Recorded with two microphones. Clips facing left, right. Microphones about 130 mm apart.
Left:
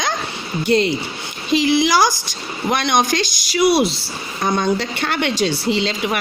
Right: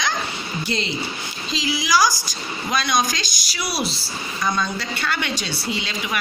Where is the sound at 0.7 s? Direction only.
70° left (ahead or behind).